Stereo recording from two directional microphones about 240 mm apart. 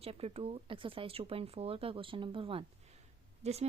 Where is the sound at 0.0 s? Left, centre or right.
Right.